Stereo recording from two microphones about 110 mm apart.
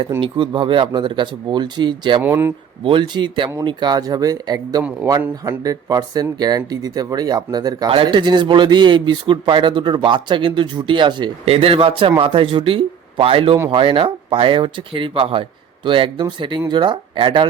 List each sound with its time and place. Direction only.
0.2 s a man's voice: 50° right (ahead or behind)
2.2 s speech: 20° right (ahead or behind)
2.8 s a man's voice: 50° right (ahead or behind)
11.4 s a man's voice: 65° right (ahead or behind)